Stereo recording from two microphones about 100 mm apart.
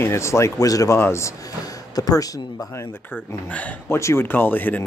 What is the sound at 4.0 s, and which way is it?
Speech, 25° left (ahead or behind).